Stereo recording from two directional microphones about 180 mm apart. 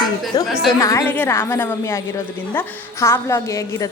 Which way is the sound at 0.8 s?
15° left (ahead or behind).